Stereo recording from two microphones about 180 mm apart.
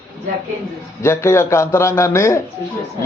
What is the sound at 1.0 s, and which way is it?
A man's voice, 15° left (ahead or behind).